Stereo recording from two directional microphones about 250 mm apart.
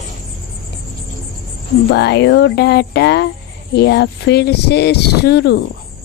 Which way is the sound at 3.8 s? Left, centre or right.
Left.